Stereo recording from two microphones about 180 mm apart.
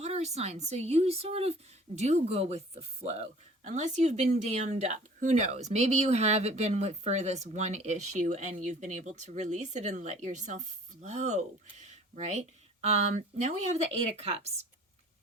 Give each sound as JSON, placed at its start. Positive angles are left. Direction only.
{"t": 0.0, "sound": "speech", "side_deg": -35}